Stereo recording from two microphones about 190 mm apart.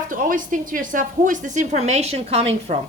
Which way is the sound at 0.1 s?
45° right (ahead or behind).